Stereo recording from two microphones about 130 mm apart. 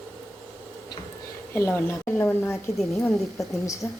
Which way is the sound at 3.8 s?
25° left (ahead or behind).